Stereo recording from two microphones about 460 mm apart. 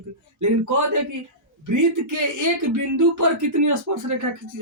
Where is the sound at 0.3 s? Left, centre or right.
Right.